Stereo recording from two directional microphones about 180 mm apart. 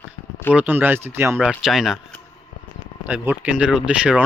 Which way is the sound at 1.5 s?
Centre (ahead or behind).